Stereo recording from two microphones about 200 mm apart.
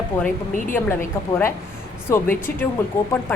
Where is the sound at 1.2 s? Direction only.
15° left (ahead or behind).